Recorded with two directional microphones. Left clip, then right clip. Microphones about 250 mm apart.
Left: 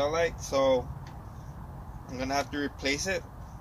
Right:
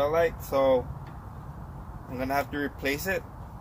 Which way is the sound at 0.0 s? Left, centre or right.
Centre.